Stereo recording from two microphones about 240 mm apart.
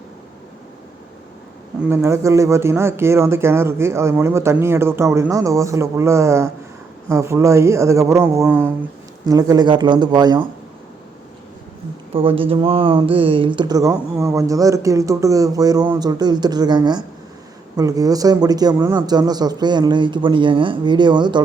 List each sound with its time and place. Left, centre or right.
1.8 s speech: centre
12.1 s speech: right